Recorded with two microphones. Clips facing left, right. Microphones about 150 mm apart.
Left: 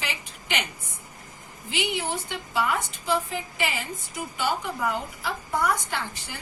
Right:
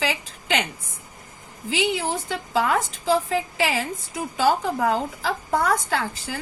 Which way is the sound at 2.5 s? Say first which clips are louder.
Right 4 dB; 90° right.